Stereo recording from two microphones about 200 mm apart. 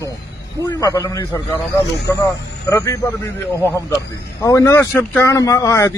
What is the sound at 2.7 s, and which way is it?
Speech, 15° left (ahead or behind).